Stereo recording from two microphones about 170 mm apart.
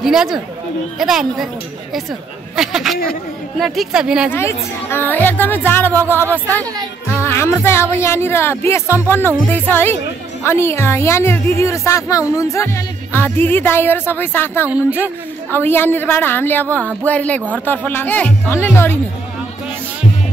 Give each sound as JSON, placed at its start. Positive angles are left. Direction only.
{"t": 0.0, "sound": "speech", "side_deg": -5}
{"t": 2.5, "sound": "speech", "side_deg": -5}
{"t": 4.3, "sound": "speech", "side_deg": 15}